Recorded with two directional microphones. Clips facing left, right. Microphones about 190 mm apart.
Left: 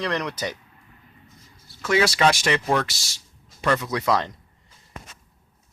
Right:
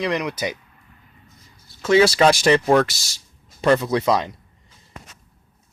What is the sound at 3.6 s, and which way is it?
Speech, 30° right (ahead or behind).